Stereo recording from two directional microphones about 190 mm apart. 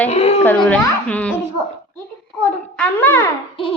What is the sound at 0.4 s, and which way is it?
Speech, 5° left (ahead or behind).